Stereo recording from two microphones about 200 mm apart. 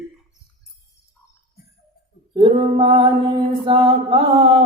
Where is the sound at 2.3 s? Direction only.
25° right (ahead or behind).